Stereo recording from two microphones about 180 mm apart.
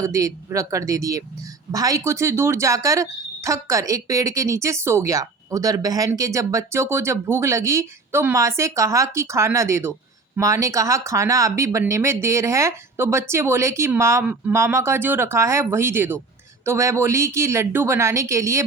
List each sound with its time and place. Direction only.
0.0 s speech: 20° right (ahead or behind)